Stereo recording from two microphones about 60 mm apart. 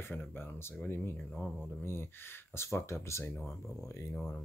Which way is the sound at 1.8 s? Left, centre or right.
Left.